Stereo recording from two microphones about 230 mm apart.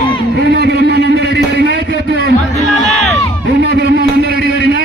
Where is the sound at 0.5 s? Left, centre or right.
Right.